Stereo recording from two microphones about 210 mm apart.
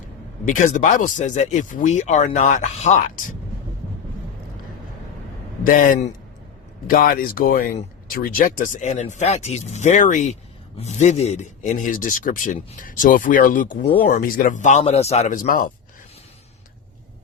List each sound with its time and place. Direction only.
0.4 s speech: 35° left (ahead or behind)
5.6 s speech: 40° left (ahead or behind)